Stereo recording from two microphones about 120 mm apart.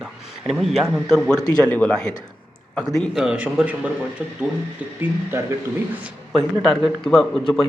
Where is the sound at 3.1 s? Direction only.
5° right (ahead or behind).